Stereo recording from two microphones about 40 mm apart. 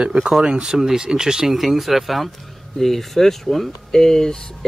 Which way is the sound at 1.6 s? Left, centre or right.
Centre.